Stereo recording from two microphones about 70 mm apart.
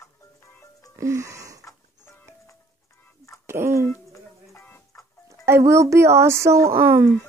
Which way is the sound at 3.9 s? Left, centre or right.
Left.